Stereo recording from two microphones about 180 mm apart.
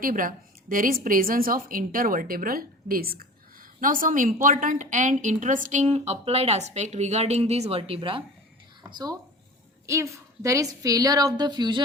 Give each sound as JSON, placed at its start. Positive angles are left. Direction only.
{"t": 0.0, "sound": "a woman's voice", "side_deg": -50}